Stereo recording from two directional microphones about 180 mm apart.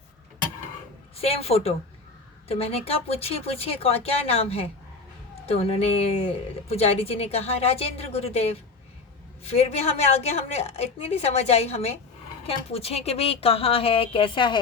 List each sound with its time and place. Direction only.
1.2 s speech: 35° left (ahead or behind)